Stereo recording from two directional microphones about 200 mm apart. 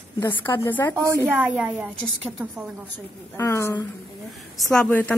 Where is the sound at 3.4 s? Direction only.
10° left (ahead or behind).